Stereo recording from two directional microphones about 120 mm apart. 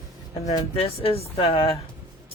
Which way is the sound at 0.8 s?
55° left (ahead or behind).